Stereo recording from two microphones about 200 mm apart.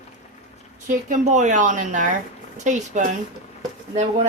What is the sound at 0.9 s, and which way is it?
A woman's voice, 35° right (ahead or behind).